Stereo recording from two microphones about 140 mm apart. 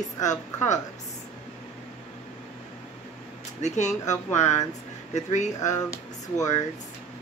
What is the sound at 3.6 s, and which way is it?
A woman's voice, 55° left (ahead or behind).